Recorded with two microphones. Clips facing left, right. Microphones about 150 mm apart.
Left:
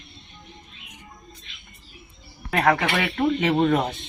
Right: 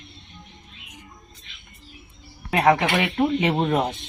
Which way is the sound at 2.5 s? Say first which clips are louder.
Right 2 dB; 10° right (ahead or behind).